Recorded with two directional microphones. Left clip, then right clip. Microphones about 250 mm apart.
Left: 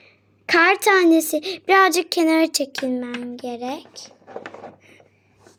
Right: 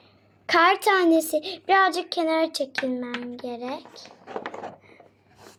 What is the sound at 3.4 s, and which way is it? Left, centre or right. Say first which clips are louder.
Speech: left 6 dB; left.